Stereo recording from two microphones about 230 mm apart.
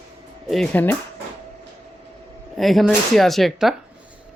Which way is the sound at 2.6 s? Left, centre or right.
Centre.